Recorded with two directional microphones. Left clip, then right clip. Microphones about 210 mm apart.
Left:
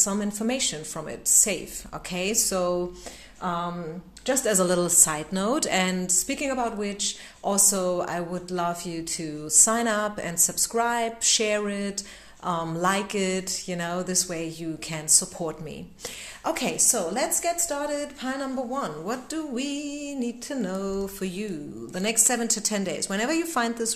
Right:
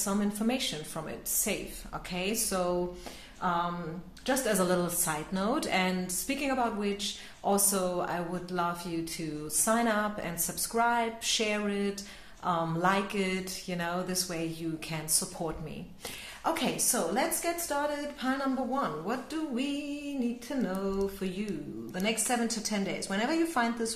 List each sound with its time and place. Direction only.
0.0 s a woman's voice: 35° left (ahead or behind)